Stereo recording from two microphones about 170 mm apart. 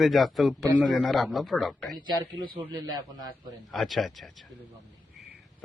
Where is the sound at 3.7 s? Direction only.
Centre (ahead or behind).